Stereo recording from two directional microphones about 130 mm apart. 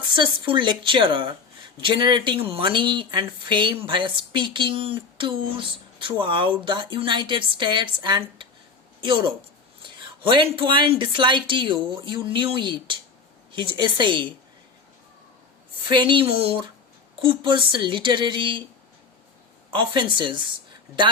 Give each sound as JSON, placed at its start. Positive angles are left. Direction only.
{"t": 0.1, "sound": "a woman's voice", "side_deg": -35}
{"t": 15.9, "sound": "speech", "side_deg": -40}
{"t": 19.7, "sound": "speech", "side_deg": -35}